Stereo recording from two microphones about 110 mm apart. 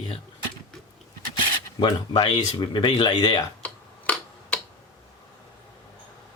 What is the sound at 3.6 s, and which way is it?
Tick-tock, 10° left (ahead or behind).